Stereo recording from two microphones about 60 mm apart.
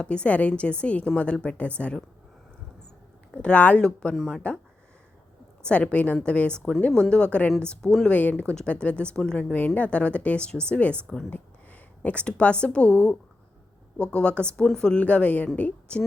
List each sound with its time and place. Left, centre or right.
0.0 s a woman's voice: centre
3.3 s a woman's voice: centre
4.1 s speech: centre
5.6 s a woman's voice: left
7.7 s speech: centre
8.1 s a woman's voice: left
9.5 s a woman's voice: left